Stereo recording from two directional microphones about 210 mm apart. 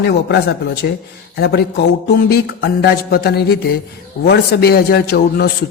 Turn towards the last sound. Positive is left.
turn(degrees=50)  # may be behind; listen again after turning